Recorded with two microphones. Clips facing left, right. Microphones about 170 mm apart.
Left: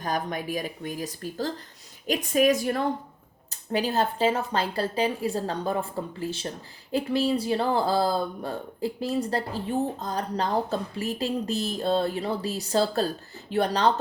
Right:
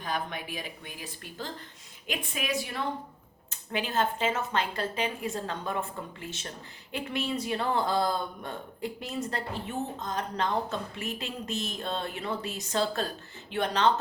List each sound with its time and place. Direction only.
0.0 s speech: 40° left (ahead or behind)